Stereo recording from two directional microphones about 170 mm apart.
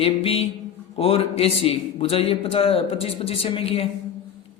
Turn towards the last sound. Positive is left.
turn(degrees=35)  # may be behind; listen again after turning